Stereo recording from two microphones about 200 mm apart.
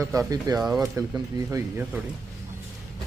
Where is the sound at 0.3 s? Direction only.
20° right (ahead or behind).